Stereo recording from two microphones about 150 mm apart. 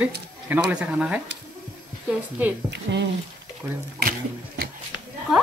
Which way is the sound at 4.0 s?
70° right (ahead or behind).